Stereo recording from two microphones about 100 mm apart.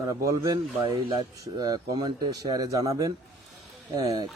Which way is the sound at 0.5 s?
55° right (ahead or behind).